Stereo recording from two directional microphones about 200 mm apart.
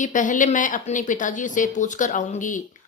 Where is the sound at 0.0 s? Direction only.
40° left (ahead or behind).